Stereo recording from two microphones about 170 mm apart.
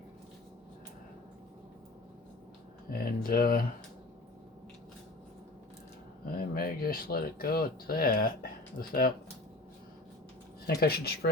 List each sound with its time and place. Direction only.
2.9 s speech: 60° left (ahead or behind)
6.2 s speech: 60° left (ahead or behind)
10.8 s speech: 70° left (ahead or behind)